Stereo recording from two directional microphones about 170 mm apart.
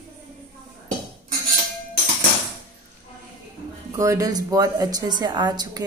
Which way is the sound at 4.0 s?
20° right (ahead or behind).